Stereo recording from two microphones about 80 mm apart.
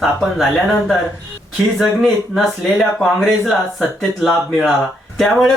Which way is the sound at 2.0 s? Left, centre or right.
Centre.